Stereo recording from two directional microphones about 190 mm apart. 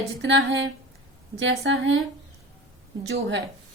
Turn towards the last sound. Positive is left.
turn(degrees=-70)  # may be behind; listen again after turning